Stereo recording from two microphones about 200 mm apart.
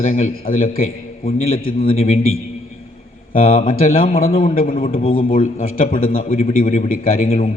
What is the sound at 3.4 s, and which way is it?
Speech, 30° left (ahead or behind).